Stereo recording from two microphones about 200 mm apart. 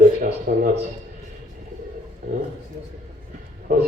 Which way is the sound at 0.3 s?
50° right (ahead or behind).